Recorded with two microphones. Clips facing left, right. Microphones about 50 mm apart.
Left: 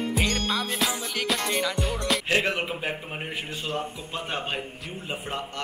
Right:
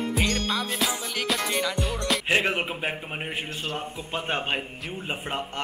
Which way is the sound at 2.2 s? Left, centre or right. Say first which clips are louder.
Right 3 dB; centre.